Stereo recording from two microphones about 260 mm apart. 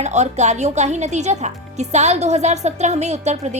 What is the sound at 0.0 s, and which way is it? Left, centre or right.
Speech, right.